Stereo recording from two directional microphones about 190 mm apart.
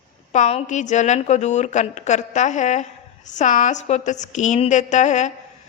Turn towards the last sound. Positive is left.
turn(degrees=40)  # may be behind; listen again after turning